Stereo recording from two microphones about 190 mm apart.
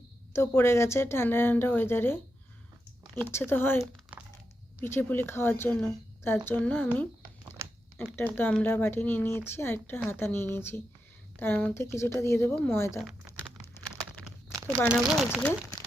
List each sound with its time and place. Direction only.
0.3 s a woman's voice: 15° left (ahead or behind)
4.1 s a sound: 10° right (ahead or behind)
4.8 s a woman's voice: 10° left (ahead or behind)
7.6 s a sound: 15° right (ahead or behind)
7.9 s a woman's voice: 10° left (ahead or behind)
14.8 s speech: 5° right (ahead or behind)